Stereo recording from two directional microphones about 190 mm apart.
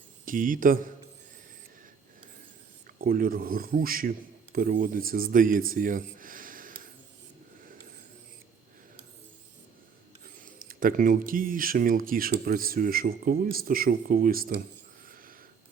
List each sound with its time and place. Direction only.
0.3 s speech: 45° right (ahead or behind)
3.0 s speech: 50° right (ahead or behind)
10.6 s speech: 45° right (ahead or behind)